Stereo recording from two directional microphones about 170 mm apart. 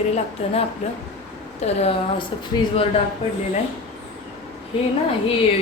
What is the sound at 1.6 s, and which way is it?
Speech, 40° left (ahead or behind).